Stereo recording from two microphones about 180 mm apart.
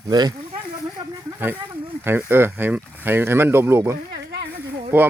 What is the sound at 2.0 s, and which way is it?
Speech, 10° right (ahead or behind).